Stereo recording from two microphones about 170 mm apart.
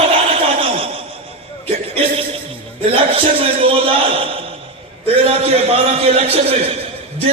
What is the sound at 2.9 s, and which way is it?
A man's voice, 30° right (ahead or behind).